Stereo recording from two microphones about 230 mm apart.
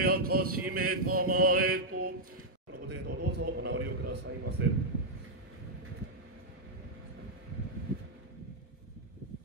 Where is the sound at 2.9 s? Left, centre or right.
Right.